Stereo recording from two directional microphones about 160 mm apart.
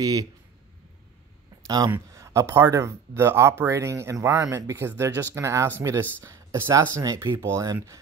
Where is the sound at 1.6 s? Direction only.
25° right (ahead or behind).